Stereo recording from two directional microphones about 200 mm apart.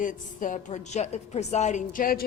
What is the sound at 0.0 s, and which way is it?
A woman's voice, 40° left (ahead or behind).